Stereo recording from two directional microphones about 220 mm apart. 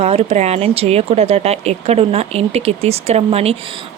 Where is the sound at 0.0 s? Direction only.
25° right (ahead or behind).